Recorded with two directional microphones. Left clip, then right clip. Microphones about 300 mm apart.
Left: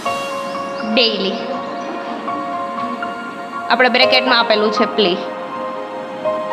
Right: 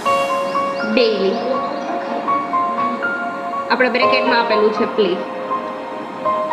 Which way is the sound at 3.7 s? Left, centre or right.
Left.